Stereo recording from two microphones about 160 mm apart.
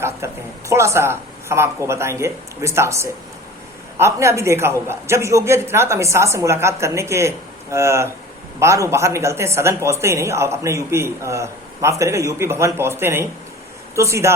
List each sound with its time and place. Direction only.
0.2 s speech: 15° right (ahead or behind)